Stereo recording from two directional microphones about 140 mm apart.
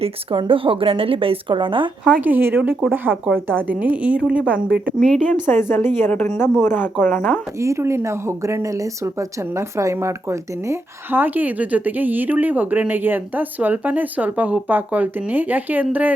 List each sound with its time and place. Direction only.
0.0 s speech: 40° right (ahead or behind)
2.2 s speech: 15° right (ahead or behind)
5.3 s a woman's voice: 15° left (ahead or behind)
7.6 s speech: 20° right (ahead or behind)